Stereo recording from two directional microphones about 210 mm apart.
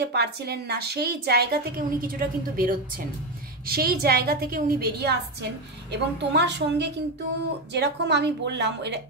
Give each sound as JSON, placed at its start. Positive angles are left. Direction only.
{"t": 0.0, "sound": "a woman's voice", "side_deg": -50}